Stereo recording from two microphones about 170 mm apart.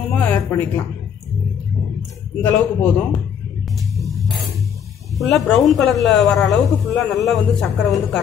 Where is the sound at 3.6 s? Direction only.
Centre (ahead or behind).